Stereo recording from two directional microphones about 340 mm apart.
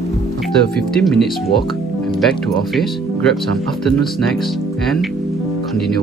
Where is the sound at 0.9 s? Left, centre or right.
Centre.